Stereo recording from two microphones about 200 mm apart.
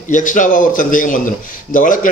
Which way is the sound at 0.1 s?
40° left (ahead or behind).